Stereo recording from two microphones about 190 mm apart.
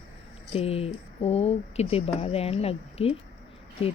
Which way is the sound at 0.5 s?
30° left (ahead or behind).